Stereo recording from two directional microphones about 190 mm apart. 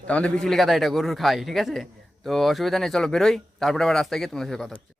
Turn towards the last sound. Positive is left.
turn(degrees=0)  # may be behind; listen again after turning